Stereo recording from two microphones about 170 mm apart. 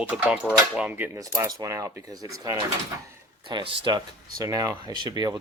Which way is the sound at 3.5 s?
25° right (ahead or behind).